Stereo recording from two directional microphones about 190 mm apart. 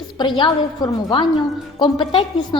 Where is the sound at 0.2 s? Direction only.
25° left (ahead or behind).